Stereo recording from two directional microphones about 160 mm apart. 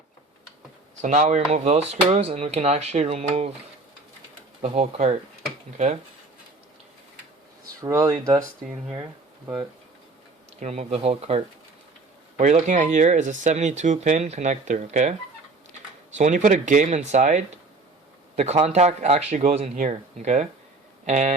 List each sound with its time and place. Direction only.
1.0 s speech: 50° right (ahead or behind)
4.6 s speech: 40° right (ahead or behind)
7.8 s speech: 20° right (ahead or behind)
10.6 s speech: 45° right (ahead or behind)
16.1 s speech: 50° right (ahead or behind)